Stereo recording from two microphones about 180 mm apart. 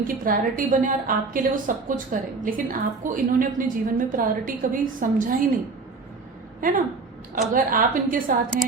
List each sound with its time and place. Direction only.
0.1 s a woman's voice: 50° right (ahead or behind)
6.6 s a woman's voice: 50° right (ahead or behind)